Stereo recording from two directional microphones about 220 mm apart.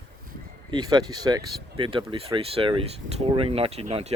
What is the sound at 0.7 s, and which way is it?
Speech, 20° right (ahead or behind).